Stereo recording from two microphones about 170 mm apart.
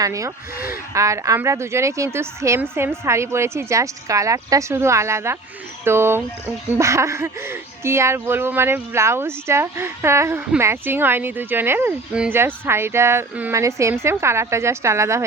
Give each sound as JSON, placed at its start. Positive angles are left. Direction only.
{"t": 0.0, "sound": "speech", "side_deg": -20}